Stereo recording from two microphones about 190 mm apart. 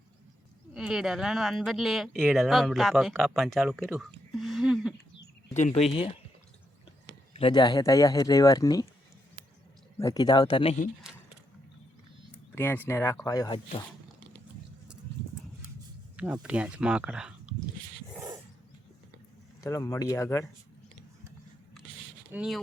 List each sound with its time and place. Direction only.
0.7 s speech: 5° right (ahead or behind)
3.8 s a sound: centre (ahead or behind)
5.5 s speech: 35° left (ahead or behind); by 8.9 s 20° left (ahead or behind)
10.0 s speech: 20° left (ahead or behind)
12.5 s speech: 10° left (ahead or behind)
16.1 s speech: 5° right (ahead or behind)
19.6 s speech: 20° left (ahead or behind)
22.3 s speech: 5° right (ahead or behind)